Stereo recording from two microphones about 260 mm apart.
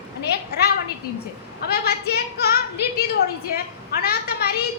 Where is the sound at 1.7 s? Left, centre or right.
Left.